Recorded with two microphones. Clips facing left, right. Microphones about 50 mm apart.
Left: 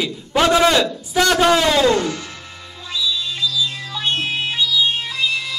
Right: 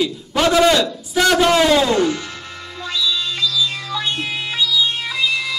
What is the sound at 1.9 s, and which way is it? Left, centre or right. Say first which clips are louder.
Music: right 2 dB; right.